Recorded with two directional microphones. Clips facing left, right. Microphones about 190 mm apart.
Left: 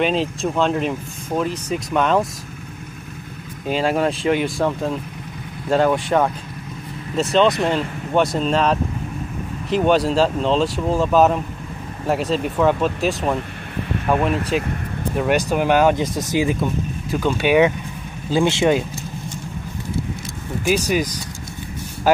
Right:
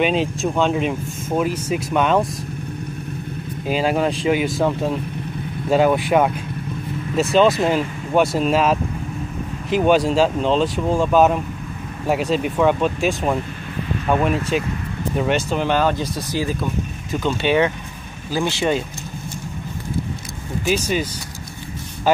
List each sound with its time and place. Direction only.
0.0 s speech: centre (ahead or behind)
3.6 s speech: centre (ahead or behind)
14.5 s speech: centre (ahead or behind)
15.3 s speech: 10° left (ahead or behind)
17.1 s speech: 10° left (ahead or behind)
18.3 s speech: 20° left (ahead or behind)
20.6 s speech: 10° left (ahead or behind)